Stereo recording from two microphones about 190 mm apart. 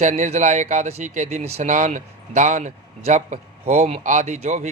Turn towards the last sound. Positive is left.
turn(degrees=-40)  # may be behind; listen again after turning